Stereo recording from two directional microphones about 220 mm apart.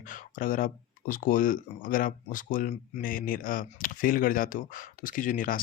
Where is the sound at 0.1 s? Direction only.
40° left (ahead or behind).